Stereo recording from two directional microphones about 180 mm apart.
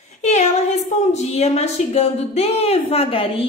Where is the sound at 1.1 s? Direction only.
35° left (ahead or behind).